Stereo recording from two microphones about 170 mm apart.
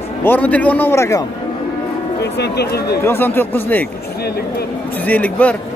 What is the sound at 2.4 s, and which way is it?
Speech, 70° left (ahead or behind).